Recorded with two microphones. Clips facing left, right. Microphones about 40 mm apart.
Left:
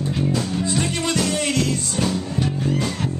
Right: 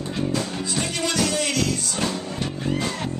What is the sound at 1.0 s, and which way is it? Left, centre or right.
Music, left.